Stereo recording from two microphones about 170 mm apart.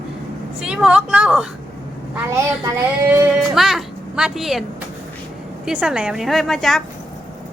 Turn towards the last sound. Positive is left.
turn(degrees=0)  # may be behind; listen again after turning